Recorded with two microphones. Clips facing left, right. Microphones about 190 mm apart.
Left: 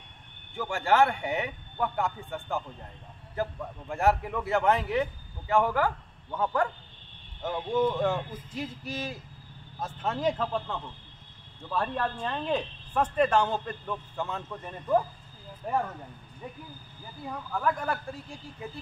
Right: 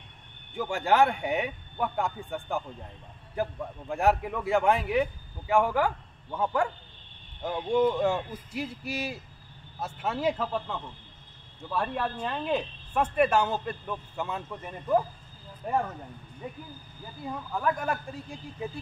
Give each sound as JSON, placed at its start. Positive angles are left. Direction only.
{"t": 0.6, "sound": "speech", "side_deg": -15}
{"t": 3.9, "sound": "a man's voice", "side_deg": -15}
{"t": 17.3, "sound": "speech", "side_deg": -10}